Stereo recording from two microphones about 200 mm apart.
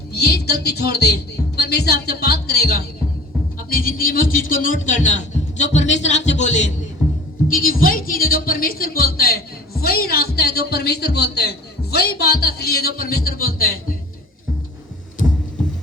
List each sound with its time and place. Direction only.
0.1 s a woman's voice: 55° left (ahead or behind)